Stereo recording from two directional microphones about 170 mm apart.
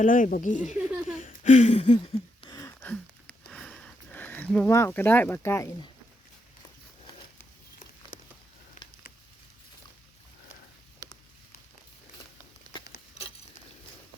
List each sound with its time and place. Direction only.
0.0 s speech: 50° left (ahead or behind)
0.9 s laughter: 5° right (ahead or behind)
1.2 s a sound: 45° left (ahead or behind)
2.5 s sniff: 20° left (ahead or behind)
4.7 s speech: 15° left (ahead or behind)